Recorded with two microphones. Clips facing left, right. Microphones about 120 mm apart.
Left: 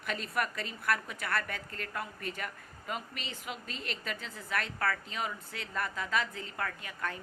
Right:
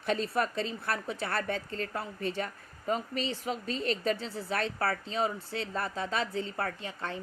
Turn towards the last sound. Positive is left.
turn(degrees=-30)  # may be behind; listen again after turning